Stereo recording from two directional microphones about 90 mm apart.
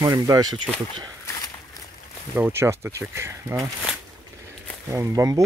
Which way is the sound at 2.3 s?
25° right (ahead or behind).